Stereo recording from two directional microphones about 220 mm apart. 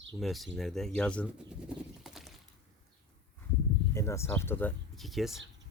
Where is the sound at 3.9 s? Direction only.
10° left (ahead or behind).